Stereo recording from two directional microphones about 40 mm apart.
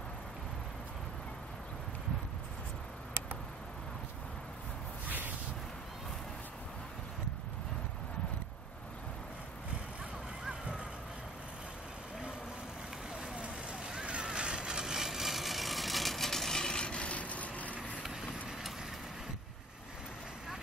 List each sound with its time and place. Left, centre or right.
13.3 s vehicle: right; by 16.8 s centre
16.8 s rub: left
18.0 s vehicle: centre